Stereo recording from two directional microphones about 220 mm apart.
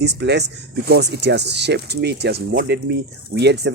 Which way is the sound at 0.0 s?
50° right (ahead or behind).